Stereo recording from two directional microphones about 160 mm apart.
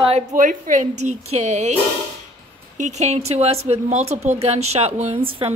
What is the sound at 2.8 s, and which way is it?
A woman's voice, 45° right (ahead or behind).